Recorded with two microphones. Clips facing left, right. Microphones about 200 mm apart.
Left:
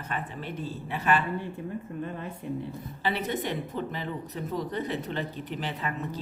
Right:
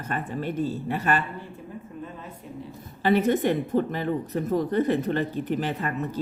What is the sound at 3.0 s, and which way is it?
Speech, 50° right (ahead or behind).